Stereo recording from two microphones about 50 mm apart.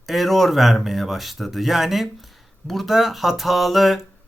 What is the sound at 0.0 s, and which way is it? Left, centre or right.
Speech, centre.